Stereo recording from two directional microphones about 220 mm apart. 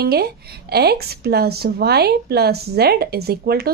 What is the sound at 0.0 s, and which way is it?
Speech, 45° right (ahead or behind).